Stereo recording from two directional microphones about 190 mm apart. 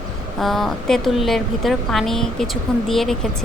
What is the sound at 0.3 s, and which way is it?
A woman's voice, centre (ahead or behind).